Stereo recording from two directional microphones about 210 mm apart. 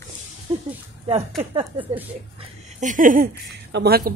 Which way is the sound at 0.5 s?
20° right (ahead or behind).